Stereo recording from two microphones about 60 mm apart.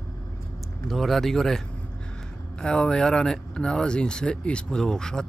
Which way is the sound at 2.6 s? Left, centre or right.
Centre.